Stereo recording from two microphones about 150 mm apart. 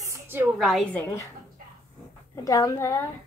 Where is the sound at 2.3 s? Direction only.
20° left (ahead or behind).